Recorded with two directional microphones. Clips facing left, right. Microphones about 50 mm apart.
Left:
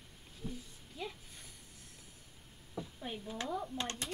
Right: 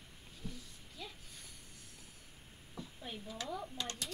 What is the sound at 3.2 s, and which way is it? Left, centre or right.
Speech, left.